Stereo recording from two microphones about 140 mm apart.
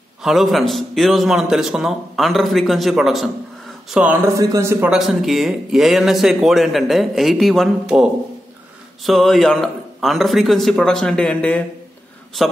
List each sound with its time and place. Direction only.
0.2 s speech: centre (ahead or behind)
4.4 s a man's voice: 20° right (ahead or behind)
4.9 s speech: centre (ahead or behind)